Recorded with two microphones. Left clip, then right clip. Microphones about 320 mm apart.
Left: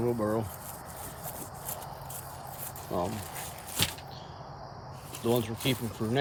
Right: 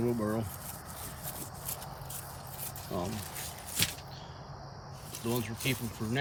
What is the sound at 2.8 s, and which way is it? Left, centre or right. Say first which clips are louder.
Speech: left 5 dB; centre.